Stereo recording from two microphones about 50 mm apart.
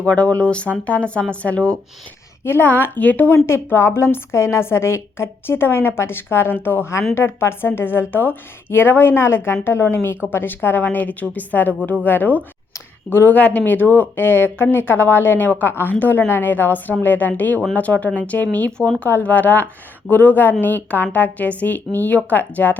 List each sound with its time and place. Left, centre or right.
0.0 s speech: left
2.4 s a woman's voice: left
3.3 s a woman's voice: left
13.3 s a woman's voice: left